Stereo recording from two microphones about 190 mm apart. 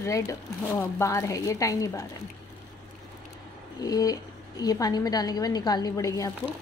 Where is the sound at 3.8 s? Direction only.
20° left (ahead or behind).